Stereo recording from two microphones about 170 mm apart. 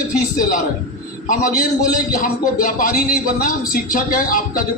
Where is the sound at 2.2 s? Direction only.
55° left (ahead or behind).